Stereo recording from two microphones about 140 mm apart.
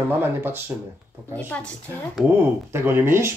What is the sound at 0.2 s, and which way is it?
Speech, 15° right (ahead or behind).